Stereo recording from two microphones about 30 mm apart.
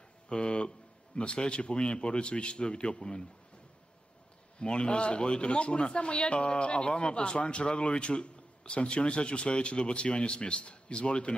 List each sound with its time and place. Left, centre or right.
0.3 s a man's voice: left
4.6 s speech: left